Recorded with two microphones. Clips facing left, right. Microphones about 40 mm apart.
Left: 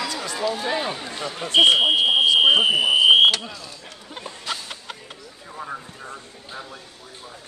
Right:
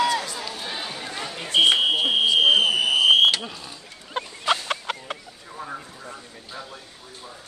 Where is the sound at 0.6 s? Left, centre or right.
Left.